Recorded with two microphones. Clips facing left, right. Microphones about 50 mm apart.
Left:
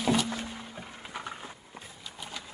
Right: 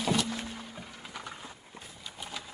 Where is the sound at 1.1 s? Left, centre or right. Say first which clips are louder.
Left 4 dB; left.